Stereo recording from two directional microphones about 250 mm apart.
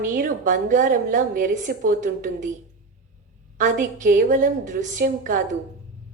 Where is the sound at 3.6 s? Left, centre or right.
Right.